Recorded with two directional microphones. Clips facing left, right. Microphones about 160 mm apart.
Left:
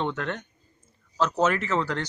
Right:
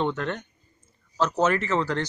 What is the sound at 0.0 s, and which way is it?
A man's voice, centre (ahead or behind).